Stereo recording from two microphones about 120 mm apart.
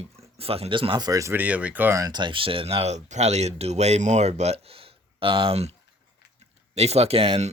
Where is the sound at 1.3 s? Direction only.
10° right (ahead or behind).